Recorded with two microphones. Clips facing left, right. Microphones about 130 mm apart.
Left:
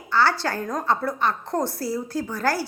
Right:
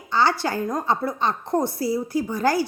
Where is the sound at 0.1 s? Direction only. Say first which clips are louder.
Right 1 dB; 15° right (ahead or behind).